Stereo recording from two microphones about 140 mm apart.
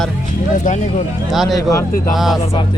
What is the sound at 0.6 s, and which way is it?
Speech, 60° left (ahead or behind).